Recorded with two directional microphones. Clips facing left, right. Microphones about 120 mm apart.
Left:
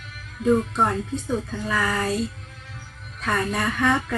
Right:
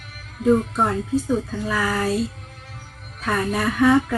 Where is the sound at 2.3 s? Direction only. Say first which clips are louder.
Right 1 dB; 45° right (ahead or behind).